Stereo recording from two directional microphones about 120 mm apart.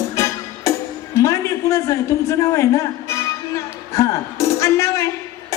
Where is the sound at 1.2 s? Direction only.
25° left (ahead or behind).